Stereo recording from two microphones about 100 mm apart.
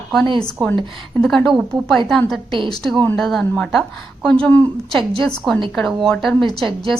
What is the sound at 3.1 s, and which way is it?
A woman's voice, centre (ahead or behind).